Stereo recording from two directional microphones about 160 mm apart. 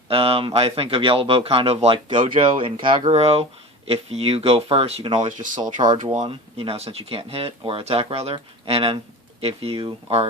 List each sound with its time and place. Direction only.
0.1 s speech: 35° right (ahead or behind)
5.4 s speech: 55° right (ahead or behind)
5.8 s speech: 30° right (ahead or behind)